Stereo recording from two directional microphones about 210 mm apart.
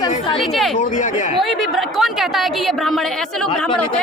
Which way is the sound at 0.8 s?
35° left (ahead or behind).